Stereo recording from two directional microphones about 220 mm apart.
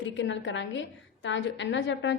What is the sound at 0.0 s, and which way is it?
A woman's voice, 55° left (ahead or behind).